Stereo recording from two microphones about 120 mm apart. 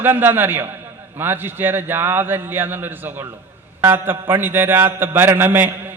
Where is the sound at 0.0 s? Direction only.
20° right (ahead or behind).